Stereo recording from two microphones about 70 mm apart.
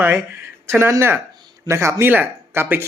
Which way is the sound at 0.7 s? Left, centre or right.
Right.